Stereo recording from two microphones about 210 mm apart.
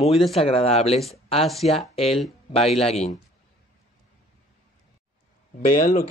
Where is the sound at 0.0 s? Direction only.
Centre (ahead or behind).